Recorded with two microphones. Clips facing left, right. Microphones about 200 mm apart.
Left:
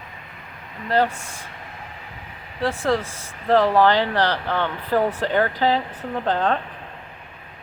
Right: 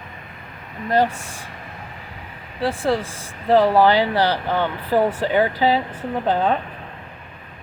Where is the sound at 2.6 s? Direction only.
15° right (ahead or behind).